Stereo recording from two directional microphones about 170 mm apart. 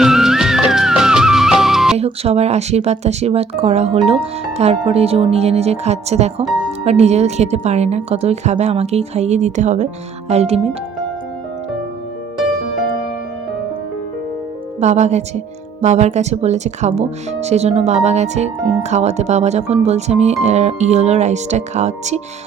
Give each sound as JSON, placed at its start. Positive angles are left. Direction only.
{"t": 0.0, "sound": "music", "side_deg": 0}
{"t": 2.0, "sound": "speech", "side_deg": -35}
{"t": 14.8, "sound": "speech", "side_deg": -40}